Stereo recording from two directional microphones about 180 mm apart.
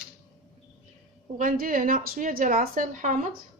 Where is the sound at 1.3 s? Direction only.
50° right (ahead or behind).